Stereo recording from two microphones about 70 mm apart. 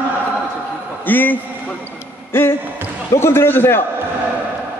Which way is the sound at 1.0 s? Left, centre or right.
Left.